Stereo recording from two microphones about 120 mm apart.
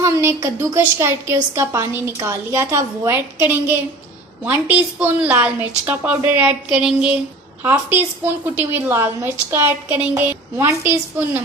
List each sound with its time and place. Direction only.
0.0 s a woman's voice: 25° right (ahead or behind)